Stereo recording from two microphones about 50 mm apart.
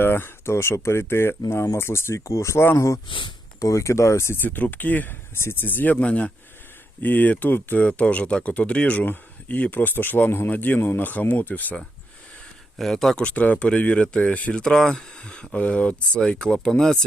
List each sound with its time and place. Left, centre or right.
0.0 s speech: left
1.6 s speech: left
2.7 s speech: left
4.4 s speech: left
5.4 s speech: left
5.6 s speech: left
7.0 s speech: left
7.9 s speech: left
10.5 s speech: left
12.8 s speech: centre
13.1 s speech: left
14.6 s speech: centre